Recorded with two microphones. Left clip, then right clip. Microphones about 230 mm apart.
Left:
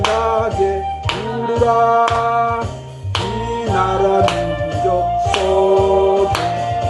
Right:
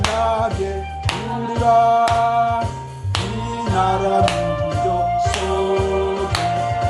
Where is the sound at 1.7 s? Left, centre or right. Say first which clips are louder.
Right 1 dB; right.